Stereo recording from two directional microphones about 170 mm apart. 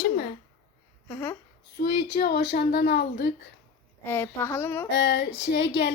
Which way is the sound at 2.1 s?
65° left (ahead or behind).